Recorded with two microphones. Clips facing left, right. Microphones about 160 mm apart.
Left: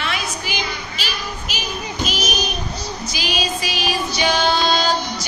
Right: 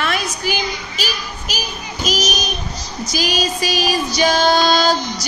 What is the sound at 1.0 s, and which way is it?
Child singing, 40° right (ahead or behind).